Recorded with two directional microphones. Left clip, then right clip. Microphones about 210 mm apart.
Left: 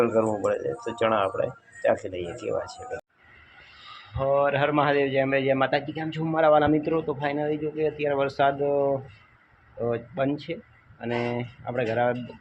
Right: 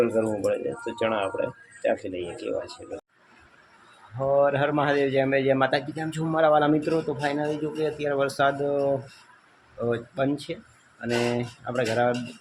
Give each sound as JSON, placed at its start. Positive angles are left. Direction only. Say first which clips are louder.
{"t": 0.0, "sound": "speech", "louder": "left 1 dB", "side_deg": 0}
{"t": 4.2, "sound": "a man's voice", "louder": "right 1 dB", "side_deg": -10}